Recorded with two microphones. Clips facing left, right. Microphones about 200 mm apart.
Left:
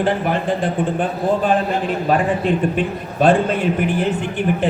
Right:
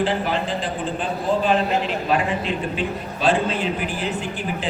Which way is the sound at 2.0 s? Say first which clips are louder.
Left 5 dB; 50° left (ahead or behind).